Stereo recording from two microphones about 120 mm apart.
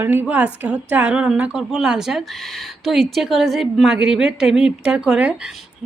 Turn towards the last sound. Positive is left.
turn(degrees=-10)  # may be behind; listen again after turning